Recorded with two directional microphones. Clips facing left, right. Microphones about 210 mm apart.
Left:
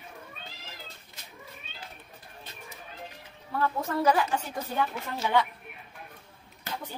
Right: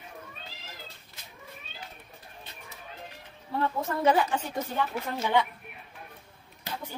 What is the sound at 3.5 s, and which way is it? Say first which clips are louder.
A woman's voice: left 1 dB; 25° right (ahead or behind).